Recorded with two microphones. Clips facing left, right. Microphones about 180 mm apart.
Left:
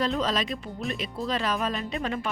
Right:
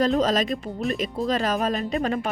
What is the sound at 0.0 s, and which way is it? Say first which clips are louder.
Speech: right 6 dB; 45° right (ahead or behind).